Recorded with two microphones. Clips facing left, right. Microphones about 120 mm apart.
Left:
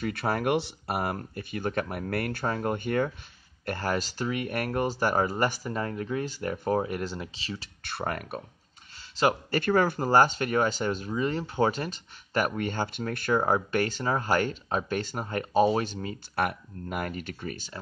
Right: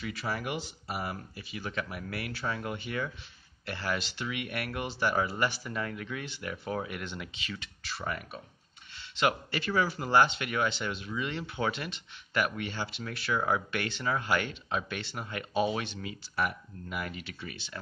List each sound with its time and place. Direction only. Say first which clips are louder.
0.0 s speech: left 7 dB; 55° left (ahead or behind); by 7.7 s 30° left (ahead or behind)
7.8 s speech: left 5 dB; 55° left (ahead or behind)
9.1 s speech: left 4 dB; 35° left (ahead or behind)
9.6 s speech: left 7 dB; 50° left (ahead or behind)
16.3 s speech: left 3 dB; 55° left (ahead or behind)